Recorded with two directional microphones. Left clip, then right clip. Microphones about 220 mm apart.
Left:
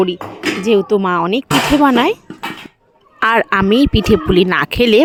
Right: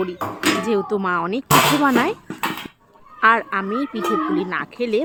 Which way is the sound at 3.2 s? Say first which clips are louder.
Left 4 dB; 50° left (ahead or behind).